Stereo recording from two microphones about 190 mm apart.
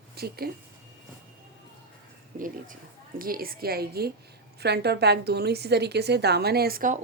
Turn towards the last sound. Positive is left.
turn(degrees=-50)  # may be behind; listen again after turning